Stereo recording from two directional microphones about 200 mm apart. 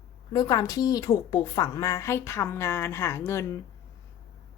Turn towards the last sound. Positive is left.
turn(degrees=15)  # may be behind; listen again after turning